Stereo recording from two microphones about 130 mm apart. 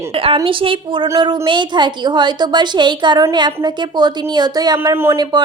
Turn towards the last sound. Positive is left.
turn(degrees=-35)  # may be behind; listen again after turning